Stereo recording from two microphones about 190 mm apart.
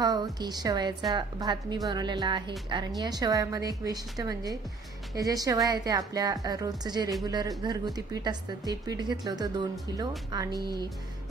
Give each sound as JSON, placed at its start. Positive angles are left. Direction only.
{"t": 0.0, "sound": "speech", "side_deg": -20}